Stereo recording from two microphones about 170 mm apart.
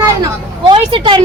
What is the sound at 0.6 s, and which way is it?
Speech, 30° right (ahead or behind).